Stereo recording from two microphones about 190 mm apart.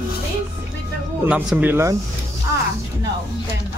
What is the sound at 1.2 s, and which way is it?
Speech, 10° right (ahead or behind).